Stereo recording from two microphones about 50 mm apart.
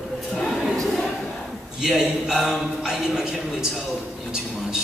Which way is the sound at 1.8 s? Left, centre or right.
Centre.